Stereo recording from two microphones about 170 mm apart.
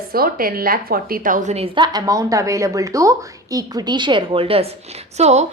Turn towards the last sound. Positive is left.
turn(degrees=-40)  # may be behind; listen again after turning